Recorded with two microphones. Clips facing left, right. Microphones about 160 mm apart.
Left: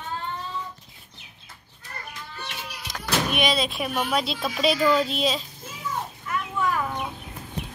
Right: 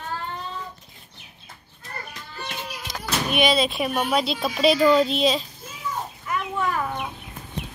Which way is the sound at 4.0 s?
Centre (ahead or behind).